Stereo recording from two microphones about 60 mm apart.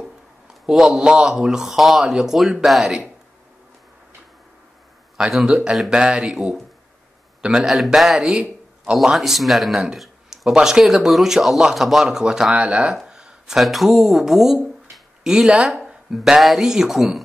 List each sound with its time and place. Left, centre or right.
0.7 s a man's voice: centre
5.5 s a man's voice: centre
6.3 s speech: centre
8.3 s a sound: centre
8.9 s speech: centre
9.9 s a sound: centre
10.5 s a man's voice: centre
12.5 s speech: right
13.0 s a sound: centre
13.6 s a man's voice: centre
15.9 s a sound: centre
16.3 s speech: centre